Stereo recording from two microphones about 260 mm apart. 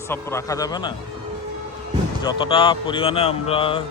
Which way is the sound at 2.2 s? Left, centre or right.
Centre.